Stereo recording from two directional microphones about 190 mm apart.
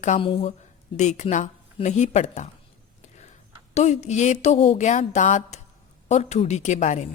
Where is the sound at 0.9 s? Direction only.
40° left (ahead or behind).